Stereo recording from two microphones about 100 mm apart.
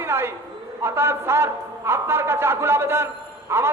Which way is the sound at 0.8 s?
25° right (ahead or behind).